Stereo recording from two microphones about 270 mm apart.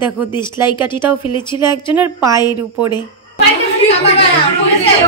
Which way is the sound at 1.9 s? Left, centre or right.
Centre.